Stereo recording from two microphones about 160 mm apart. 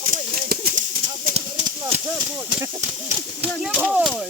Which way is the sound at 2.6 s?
15° right (ahead or behind).